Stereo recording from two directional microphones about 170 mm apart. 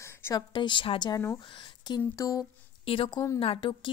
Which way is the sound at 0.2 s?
25° left (ahead or behind).